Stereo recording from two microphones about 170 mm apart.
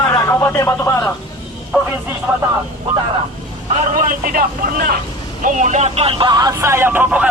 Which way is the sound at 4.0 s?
55° right (ahead or behind).